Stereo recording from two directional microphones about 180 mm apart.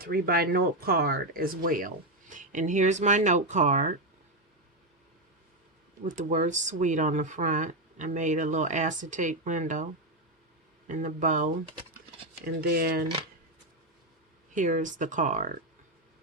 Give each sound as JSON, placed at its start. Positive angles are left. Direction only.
{"t": 0.0, "sound": "speech", "side_deg": -55}
{"t": 6.1, "sound": "speech", "side_deg": -45}
{"t": 10.8, "sound": "speech", "side_deg": -45}
{"t": 12.7, "sound": "speech", "side_deg": -55}
{"t": 14.5, "sound": "speech", "side_deg": -45}